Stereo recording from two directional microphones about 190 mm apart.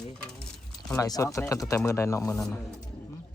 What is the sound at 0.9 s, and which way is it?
Speech, 20° left (ahead or behind).